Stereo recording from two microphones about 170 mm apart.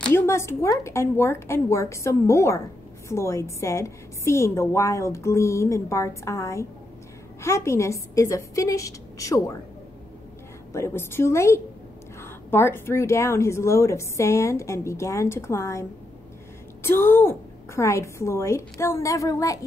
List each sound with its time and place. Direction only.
0.0 s a woman's voice: 15° left (ahead or behind)
10.7 s a woman's voice: 15° left (ahead or behind)
16.8 s a woman's voice: 15° left (ahead or behind)